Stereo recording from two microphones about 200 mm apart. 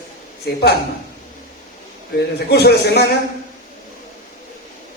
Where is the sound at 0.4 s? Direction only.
55° left (ahead or behind).